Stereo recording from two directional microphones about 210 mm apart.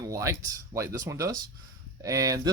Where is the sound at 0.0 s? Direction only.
15° right (ahead or behind).